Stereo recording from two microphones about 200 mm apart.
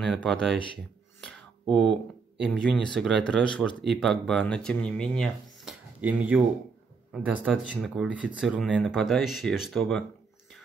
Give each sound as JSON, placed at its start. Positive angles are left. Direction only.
{"t": 0.0, "sound": "speech", "side_deg": 0}
{"t": 1.2, "sound": "a sound", "side_deg": 0}
{"t": 2.4, "sound": "speech", "side_deg": 0}